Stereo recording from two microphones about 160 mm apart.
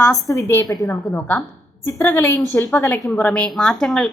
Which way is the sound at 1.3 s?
10° left (ahead or behind).